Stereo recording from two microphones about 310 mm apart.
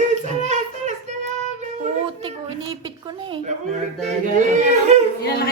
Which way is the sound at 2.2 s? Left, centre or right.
Centre.